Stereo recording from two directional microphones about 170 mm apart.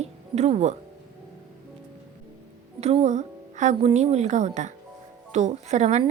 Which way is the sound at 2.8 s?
40° right (ahead or behind).